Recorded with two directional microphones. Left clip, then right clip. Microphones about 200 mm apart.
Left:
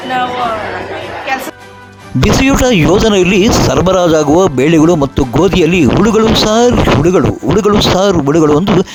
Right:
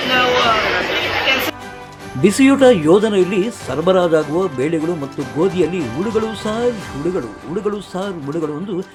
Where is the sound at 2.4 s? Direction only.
50° left (ahead or behind).